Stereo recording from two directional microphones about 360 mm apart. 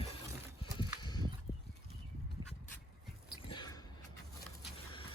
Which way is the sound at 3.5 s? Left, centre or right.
Centre.